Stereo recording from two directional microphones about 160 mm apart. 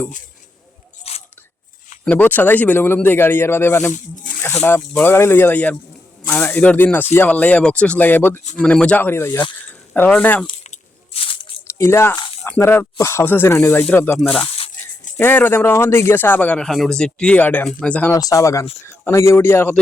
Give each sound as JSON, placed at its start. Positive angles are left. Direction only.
{"t": 1.1, "sound": "biting", "side_deg": 40}
{"t": 2.0, "sound": "speech", "side_deg": 10}
{"t": 3.9, "sound": "speech", "side_deg": 50}
{"t": 4.6, "sound": "speech", "side_deg": 15}
{"t": 10.6, "sound": "a sound", "side_deg": 40}
{"t": 11.7, "sound": "speech", "side_deg": 15}
{"t": 14.4, "sound": "a sound", "side_deg": 35}
{"t": 15.2, "sound": "speech", "side_deg": 10}
{"t": 18.1, "sound": "speech", "side_deg": 20}